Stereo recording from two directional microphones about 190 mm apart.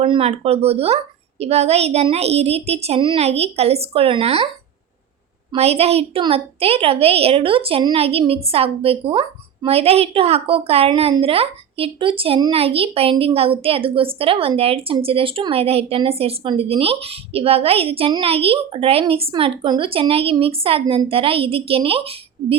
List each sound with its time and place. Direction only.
0.0 s a woman's voice: 30° right (ahead or behind)
5.5 s a woman's voice: 35° right (ahead or behind)